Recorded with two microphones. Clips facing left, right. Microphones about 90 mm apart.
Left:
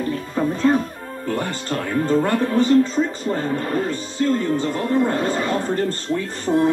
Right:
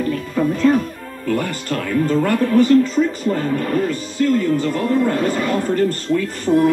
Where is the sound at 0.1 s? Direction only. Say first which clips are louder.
Right 3 dB; 30° left (ahead or behind).